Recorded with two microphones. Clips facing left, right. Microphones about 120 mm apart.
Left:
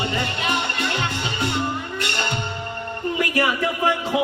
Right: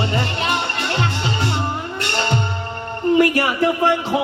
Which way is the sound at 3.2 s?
30° right (ahead or behind).